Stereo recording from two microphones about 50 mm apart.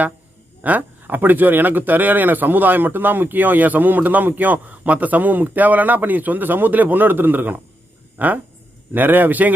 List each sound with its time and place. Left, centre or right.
0.6 s a man's voice: right